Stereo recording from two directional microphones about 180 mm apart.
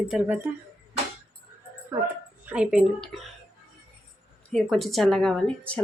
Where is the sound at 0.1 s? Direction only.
10° right (ahead or behind).